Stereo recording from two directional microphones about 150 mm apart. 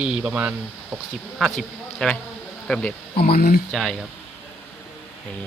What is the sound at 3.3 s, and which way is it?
Speech, 90° left.